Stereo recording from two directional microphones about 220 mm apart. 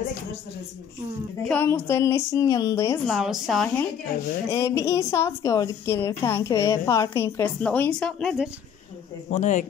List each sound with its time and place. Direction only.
1.5 s a woman's voice: 10° left (ahead or behind)
3.1 s a woman's voice: centre (ahead or behind)
4.5 s a woman's voice: 15° left (ahead or behind)
9.3 s speech: 35° left (ahead or behind)